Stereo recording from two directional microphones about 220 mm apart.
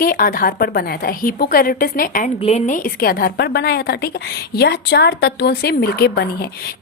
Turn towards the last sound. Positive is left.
turn(degrees=45)  # may be behind; listen again after turning